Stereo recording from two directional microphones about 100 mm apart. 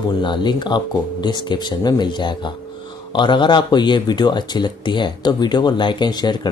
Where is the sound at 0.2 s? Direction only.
50° left (ahead or behind).